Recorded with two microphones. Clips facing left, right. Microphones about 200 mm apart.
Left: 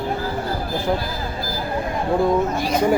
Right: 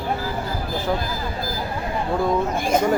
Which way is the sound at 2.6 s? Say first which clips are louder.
Right 1 dB; 50° right (ahead or behind).